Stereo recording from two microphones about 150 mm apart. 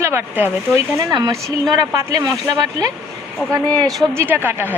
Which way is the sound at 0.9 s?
25° right (ahead or behind).